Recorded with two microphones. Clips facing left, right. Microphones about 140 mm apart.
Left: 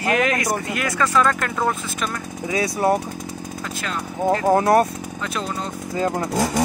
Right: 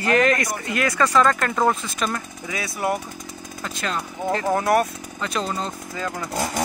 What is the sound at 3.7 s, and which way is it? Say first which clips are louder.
Speech: right 1 dB; 5° left (ahead or behind).